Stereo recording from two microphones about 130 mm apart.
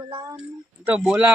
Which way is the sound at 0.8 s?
5° right (ahead or behind).